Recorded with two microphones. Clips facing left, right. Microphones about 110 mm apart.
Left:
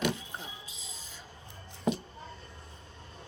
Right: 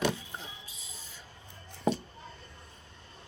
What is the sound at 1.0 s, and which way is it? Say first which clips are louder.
Rub: left 2 dB; 90° left.